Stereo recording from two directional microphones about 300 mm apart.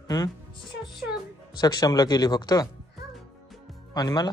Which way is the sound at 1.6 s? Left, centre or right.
Centre.